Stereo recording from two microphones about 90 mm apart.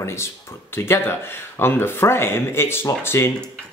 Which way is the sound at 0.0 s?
30° left (ahead or behind).